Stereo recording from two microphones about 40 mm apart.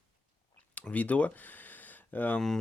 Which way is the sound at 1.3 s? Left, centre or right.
Left.